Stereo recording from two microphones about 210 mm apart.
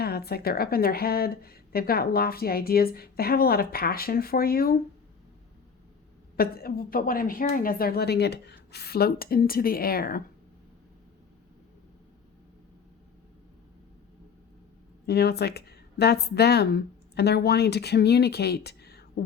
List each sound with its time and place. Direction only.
0.0 s a woman's voice: 50° left (ahead or behind)
6.3 s a woman's voice: 45° left (ahead or behind)
15.0 s a woman's voice: 50° left (ahead or behind)